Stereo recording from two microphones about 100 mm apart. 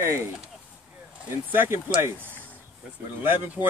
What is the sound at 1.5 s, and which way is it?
Speech, 20° right (ahead or behind).